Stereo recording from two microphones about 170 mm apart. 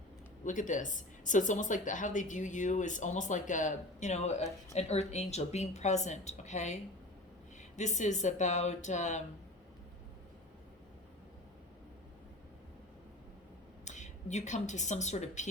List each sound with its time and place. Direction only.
0.4 s speech: 50° left (ahead or behind)
7.8 s speech: 45° left (ahead or behind)
13.8 s a woman's voice: 45° left (ahead or behind)